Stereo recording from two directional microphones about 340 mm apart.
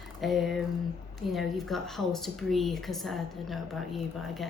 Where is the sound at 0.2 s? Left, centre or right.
Centre.